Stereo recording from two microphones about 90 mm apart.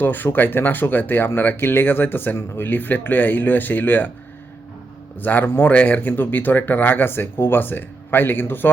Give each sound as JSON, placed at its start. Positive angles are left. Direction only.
{"t": 0.0, "sound": "speech", "side_deg": 20}
{"t": 5.2, "sound": "speech", "side_deg": 20}